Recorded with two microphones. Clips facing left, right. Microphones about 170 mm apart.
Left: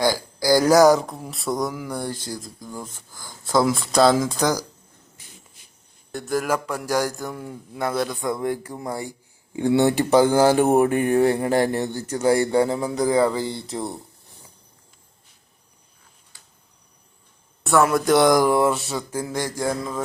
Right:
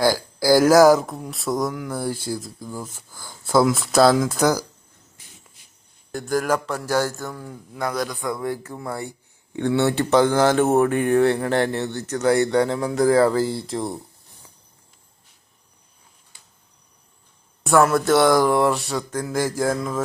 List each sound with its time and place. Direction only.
0.0 s speech: 10° right (ahead or behind)
6.1 s speech: centre (ahead or behind)
17.8 s speech: 10° left (ahead or behind)
18.5 s speech: centre (ahead or behind)
19.3 s mantra: 5° right (ahead or behind)